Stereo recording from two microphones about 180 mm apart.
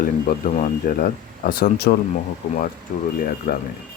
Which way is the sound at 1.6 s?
60° left (ahead or behind).